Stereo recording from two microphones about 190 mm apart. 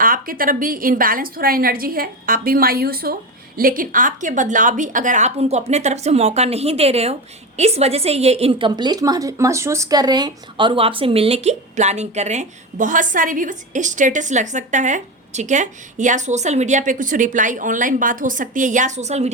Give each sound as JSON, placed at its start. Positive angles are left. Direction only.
{"t": 0.0, "sound": "a woman's voice", "side_deg": -50}